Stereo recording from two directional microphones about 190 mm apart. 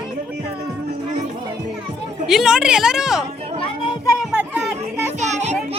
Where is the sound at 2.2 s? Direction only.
5° right (ahead or behind).